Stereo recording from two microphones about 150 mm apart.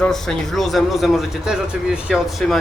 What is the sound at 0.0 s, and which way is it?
Speech, 5° left (ahead or behind).